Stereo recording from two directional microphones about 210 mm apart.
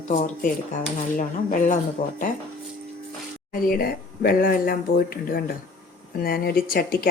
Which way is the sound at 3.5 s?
45° left (ahead or behind).